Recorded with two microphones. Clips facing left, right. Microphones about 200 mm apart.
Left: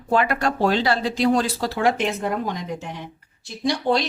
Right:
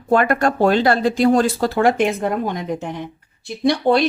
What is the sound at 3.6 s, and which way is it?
Speech, 60° right (ahead or behind).